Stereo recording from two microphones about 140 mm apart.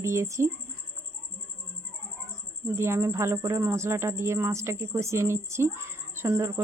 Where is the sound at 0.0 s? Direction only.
20° right (ahead or behind).